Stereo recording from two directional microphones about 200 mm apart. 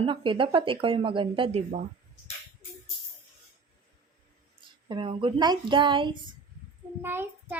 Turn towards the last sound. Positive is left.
turn(degrees=-10)  # may be behind; listen again after turning